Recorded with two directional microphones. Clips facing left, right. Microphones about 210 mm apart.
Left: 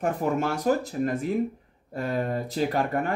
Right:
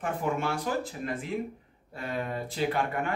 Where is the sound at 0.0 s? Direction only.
45° left (ahead or behind).